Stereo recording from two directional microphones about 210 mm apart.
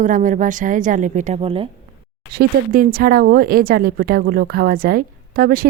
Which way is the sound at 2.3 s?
45° right (ahead or behind).